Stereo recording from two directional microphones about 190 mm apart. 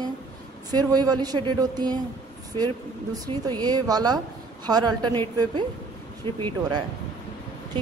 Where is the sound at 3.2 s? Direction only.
25° right (ahead or behind).